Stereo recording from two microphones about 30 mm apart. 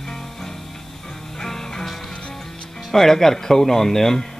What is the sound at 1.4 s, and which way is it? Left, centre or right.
Music, centre.